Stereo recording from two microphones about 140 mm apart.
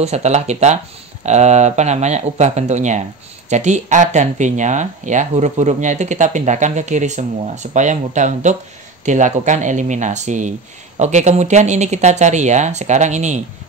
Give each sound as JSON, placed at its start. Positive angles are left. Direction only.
{"t": 0.0, "sound": "speech", "side_deg": -50}